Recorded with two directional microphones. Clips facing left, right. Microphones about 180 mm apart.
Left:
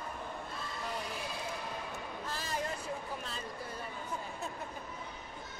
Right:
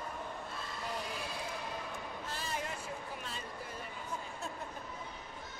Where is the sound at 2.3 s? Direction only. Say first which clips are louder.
Left 2 dB; 40° left (ahead or behind).